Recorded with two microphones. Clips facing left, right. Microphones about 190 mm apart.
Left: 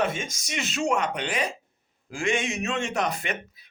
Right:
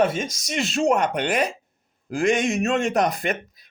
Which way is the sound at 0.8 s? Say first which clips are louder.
Right 5 dB; 55° right (ahead or behind).